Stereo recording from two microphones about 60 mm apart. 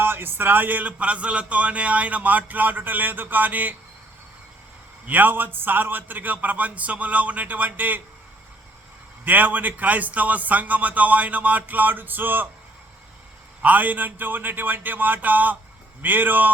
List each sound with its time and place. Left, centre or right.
0.0 s a man's voice: right
5.0 s a man's voice: right
9.2 s a man's voice: right
13.6 s speech: right